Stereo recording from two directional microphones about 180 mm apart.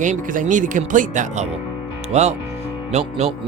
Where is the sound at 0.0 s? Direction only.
45° right (ahead or behind).